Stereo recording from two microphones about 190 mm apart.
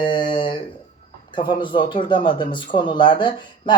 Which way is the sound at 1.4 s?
25° left (ahead or behind).